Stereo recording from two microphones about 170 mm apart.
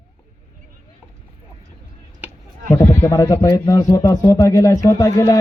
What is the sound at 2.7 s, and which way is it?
A man's voice, 15° left (ahead or behind).